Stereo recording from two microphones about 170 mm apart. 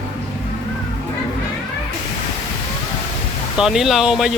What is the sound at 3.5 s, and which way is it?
Speech, centre (ahead or behind).